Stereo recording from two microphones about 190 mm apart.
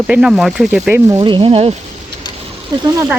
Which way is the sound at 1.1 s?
25° right (ahead or behind).